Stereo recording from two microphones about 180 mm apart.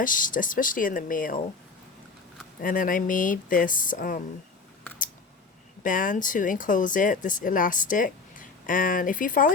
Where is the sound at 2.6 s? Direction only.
50° left (ahead or behind).